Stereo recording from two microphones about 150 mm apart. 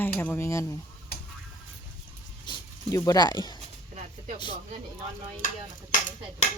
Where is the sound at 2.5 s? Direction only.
25° left (ahead or behind).